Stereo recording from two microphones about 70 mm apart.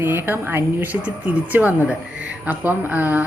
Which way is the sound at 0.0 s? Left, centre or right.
Right.